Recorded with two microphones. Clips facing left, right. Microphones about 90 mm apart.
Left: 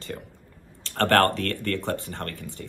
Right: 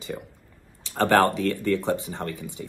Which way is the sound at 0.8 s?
15° right (ahead or behind).